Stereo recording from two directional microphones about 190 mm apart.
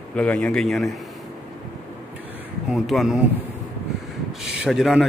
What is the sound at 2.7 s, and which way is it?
Speech, centre (ahead or behind).